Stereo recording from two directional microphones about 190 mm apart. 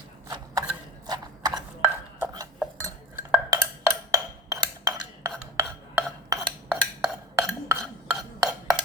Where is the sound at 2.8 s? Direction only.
15° right (ahead or behind).